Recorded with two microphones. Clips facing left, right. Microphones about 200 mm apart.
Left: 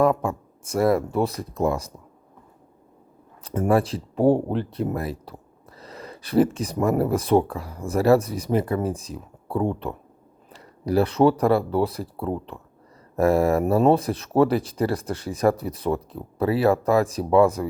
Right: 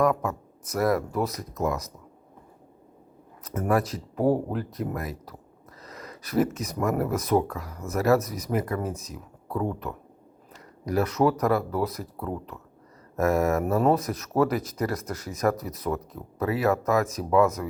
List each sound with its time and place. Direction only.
0.0 s speech: 30° left (ahead or behind)
3.4 s speech: 30° left (ahead or behind)